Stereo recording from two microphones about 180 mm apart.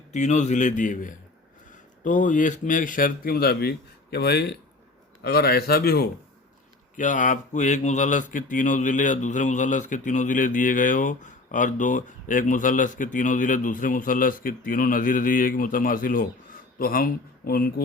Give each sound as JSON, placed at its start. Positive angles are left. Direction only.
{"t": 0.1, "sound": "a man's voice", "side_deg": 40}
{"t": 6.9, "sound": "speech", "side_deg": 45}